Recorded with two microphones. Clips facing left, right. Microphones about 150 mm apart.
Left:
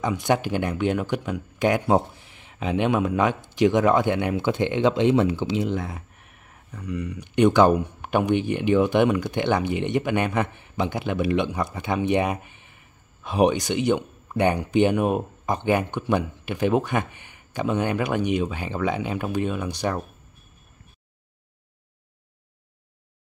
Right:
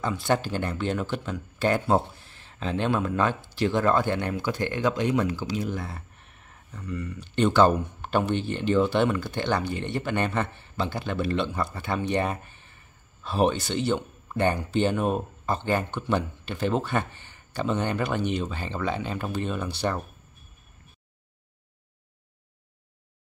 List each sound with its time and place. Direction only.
0.0 s speech: 15° left (ahead or behind)